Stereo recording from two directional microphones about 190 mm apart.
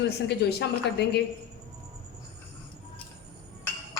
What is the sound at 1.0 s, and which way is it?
Speech, 60° left (ahead or behind).